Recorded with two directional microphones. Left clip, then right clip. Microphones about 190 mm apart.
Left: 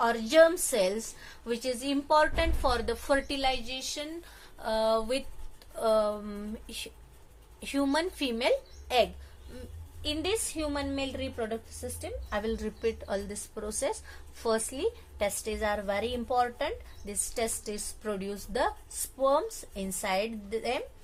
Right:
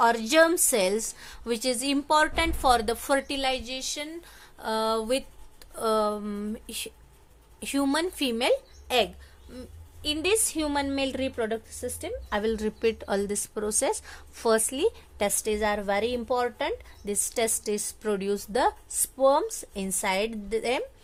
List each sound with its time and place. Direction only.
0.0 s a woman's voice: 55° right (ahead or behind)